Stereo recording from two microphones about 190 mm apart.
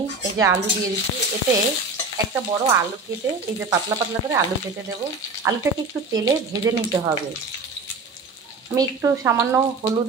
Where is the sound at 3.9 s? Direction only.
15° right (ahead or behind).